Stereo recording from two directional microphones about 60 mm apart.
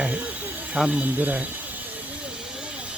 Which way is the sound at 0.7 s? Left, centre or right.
Centre.